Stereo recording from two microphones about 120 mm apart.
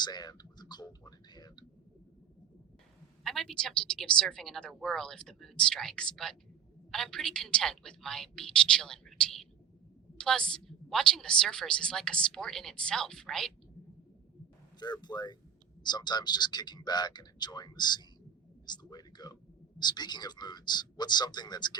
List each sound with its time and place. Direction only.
0.0 s speech: 35° left (ahead or behind)
3.2 s a woman's voice: 5° left (ahead or behind)
14.8 s speech: 35° left (ahead or behind)
18.6 s a sound: 35° left (ahead or behind)
19.8 s speech: 35° left (ahead or behind)